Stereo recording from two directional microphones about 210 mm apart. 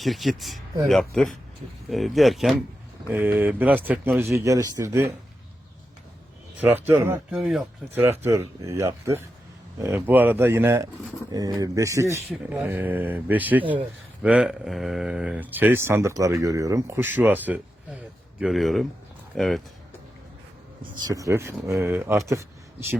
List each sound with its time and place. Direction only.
0.0 s speech: centre (ahead or behind)
6.6 s speech: 5° right (ahead or behind)
8.2 s speech: 10° right (ahead or behind)
21.0 s speech: 15° right (ahead or behind)